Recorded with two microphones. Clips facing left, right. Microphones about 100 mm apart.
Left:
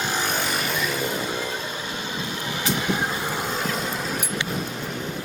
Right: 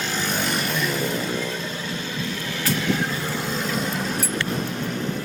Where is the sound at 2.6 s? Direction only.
15° left (ahead or behind).